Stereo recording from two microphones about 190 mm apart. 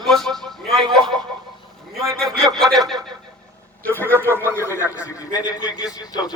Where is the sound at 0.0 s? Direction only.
Centre (ahead or behind).